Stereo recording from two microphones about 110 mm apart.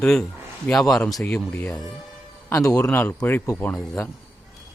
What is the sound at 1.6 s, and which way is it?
Speech, centre (ahead or behind).